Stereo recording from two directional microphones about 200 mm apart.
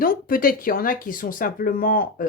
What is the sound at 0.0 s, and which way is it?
Speech, 45° left (ahead or behind).